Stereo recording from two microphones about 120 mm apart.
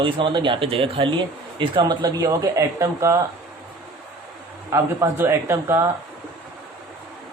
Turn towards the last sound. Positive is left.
turn(degrees=-20)  # may be behind; listen again after turning